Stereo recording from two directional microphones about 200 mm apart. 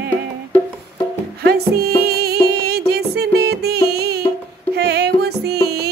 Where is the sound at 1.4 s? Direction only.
55° right (ahead or behind).